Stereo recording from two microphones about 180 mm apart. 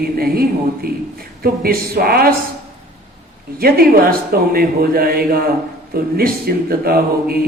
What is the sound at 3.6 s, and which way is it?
Speech, 55° right (ahead or behind).